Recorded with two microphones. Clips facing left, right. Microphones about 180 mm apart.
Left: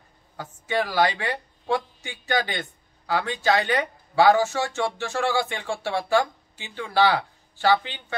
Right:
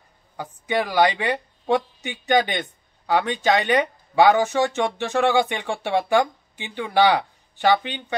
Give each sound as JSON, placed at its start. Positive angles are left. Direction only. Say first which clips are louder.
{"t": 0.4, "sound": "speech", "louder": "right 2 dB", "side_deg": -15}